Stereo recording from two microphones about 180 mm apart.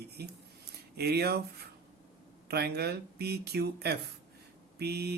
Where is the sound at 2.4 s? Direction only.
65° right (ahead or behind).